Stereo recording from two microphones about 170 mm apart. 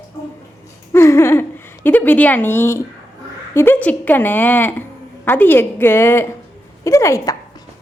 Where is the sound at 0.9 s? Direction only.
15° left (ahead or behind).